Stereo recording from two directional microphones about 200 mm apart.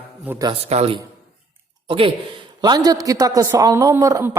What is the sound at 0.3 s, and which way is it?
Speech, 15° right (ahead or behind).